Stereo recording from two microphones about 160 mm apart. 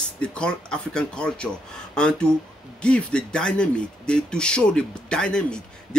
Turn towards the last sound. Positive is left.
turn(degrees=5)  # may be behind; listen again after turning